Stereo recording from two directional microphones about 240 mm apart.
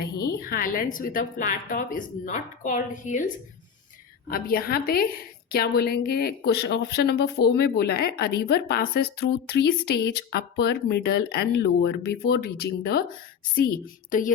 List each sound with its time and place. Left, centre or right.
0.3 s speech: left
4.3 s speech: left